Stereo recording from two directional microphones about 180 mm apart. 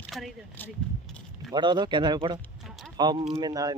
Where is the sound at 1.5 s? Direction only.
25° right (ahead or behind).